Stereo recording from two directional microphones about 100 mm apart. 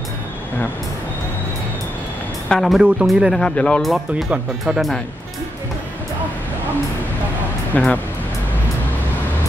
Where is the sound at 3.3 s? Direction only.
10° left (ahead or behind).